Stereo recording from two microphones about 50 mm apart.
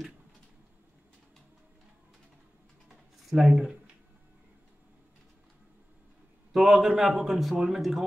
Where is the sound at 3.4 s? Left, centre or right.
Centre.